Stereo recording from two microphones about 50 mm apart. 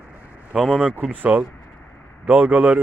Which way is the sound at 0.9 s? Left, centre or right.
Right.